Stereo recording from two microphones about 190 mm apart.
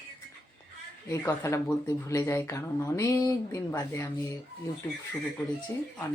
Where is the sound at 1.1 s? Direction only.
15° left (ahead or behind).